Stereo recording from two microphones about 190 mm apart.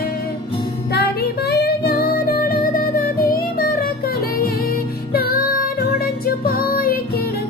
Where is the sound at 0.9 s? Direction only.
55° left (ahead or behind).